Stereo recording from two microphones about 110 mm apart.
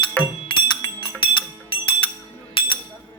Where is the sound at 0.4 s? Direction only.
50° left (ahead or behind).